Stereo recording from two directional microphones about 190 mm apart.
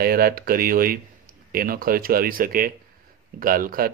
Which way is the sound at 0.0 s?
50° right (ahead or behind).